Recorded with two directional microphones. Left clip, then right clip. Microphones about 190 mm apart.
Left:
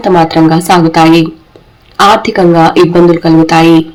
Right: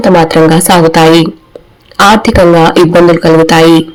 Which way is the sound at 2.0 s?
35° right (ahead or behind).